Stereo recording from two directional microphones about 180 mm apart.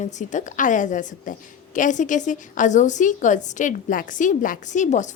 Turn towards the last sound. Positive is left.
turn(degrees=40)  # may be behind; listen again after turning